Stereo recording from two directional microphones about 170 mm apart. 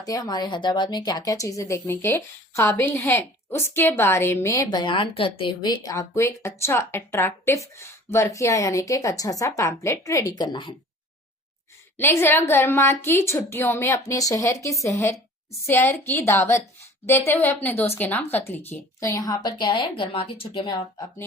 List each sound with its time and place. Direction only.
0.0 s a woman's voice: 20° left (ahead or behind)
11.9 s a woman's voice: 15° left (ahead or behind)